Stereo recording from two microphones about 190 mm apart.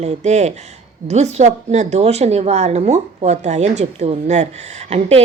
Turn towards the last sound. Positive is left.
turn(degrees=-35)  # may be behind; listen again after turning